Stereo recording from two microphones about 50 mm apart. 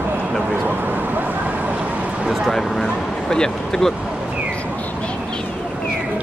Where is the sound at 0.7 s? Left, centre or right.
Right.